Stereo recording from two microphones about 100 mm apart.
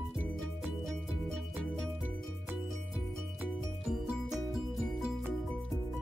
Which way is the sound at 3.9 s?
5° right (ahead or behind).